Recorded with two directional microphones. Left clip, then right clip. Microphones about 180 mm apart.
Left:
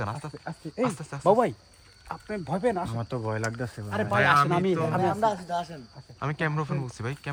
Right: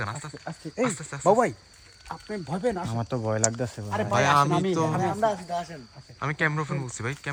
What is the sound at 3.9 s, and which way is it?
Speech, 10° right (ahead or behind).